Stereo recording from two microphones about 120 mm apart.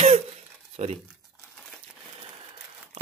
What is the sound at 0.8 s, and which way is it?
Speech, 70° right (ahead or behind).